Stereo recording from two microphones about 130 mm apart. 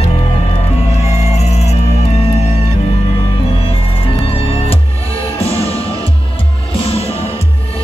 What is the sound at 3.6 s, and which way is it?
Music, 45° left (ahead or behind).